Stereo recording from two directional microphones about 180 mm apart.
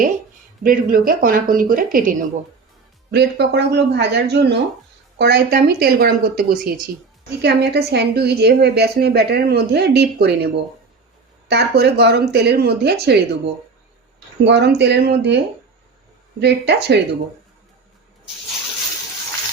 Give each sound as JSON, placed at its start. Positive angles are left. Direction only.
{"t": 0.6, "sound": "speech", "side_deg": -50}
{"t": 3.1, "sound": "a woman's voice", "side_deg": -70}
{"t": 16.4, "sound": "speech", "side_deg": -70}